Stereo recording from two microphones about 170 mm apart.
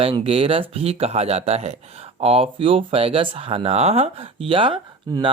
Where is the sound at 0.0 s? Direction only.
35° right (ahead or behind).